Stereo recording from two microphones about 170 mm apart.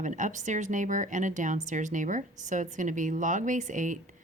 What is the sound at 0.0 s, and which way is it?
Speech, 45° right (ahead or behind).